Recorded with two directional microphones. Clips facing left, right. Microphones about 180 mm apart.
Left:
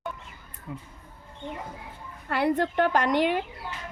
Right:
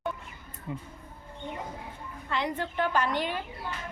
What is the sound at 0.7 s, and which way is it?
Speech, centre (ahead or behind).